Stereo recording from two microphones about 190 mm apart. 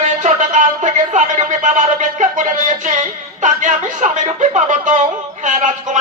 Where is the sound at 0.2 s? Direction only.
40° right (ahead or behind).